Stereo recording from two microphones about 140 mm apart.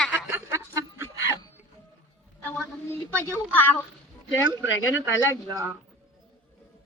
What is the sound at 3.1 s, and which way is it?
Speech, 15° left (ahead or behind).